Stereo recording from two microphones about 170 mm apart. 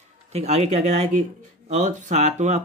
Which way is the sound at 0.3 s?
40° right (ahead or behind).